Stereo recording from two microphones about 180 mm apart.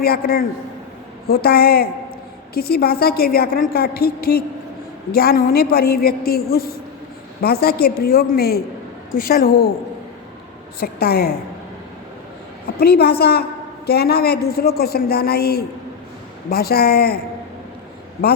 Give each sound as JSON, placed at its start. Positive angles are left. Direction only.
{"t": 0.0, "sound": "a woman's voice", "side_deg": 60}
{"t": 10.8, "sound": "a woman's voice", "side_deg": 60}
{"t": 12.6, "sound": "a woman's voice", "side_deg": 60}